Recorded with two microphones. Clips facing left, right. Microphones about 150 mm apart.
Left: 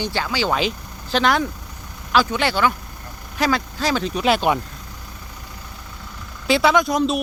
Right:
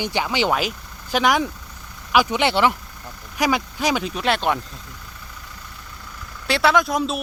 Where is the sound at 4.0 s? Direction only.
Centre (ahead or behind).